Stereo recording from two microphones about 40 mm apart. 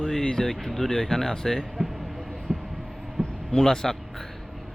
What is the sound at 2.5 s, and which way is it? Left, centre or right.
Heart sounds, right.